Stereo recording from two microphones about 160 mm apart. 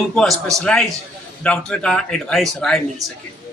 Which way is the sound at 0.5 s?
5° left (ahead or behind).